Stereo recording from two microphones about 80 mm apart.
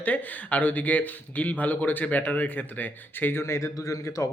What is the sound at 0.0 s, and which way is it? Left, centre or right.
Speech, left.